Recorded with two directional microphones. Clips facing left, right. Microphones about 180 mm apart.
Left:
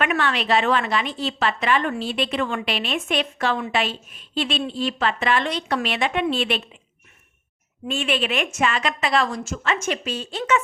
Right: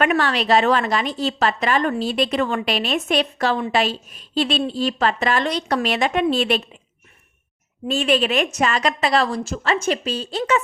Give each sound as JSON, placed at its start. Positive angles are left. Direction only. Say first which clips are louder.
{"t": 0.0, "sound": "a woman's voice", "louder": "right 4 dB", "side_deg": -35}
{"t": 7.9, "sound": "a woman's voice", "louder": "right 5 dB", "side_deg": -40}